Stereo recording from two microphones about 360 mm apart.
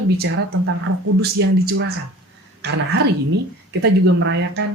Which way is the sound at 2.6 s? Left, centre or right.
Right.